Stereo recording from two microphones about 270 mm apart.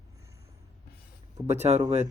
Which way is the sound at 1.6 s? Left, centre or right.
Right.